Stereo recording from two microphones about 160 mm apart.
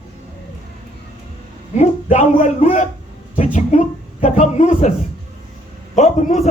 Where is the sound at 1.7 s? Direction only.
45° left (ahead or behind).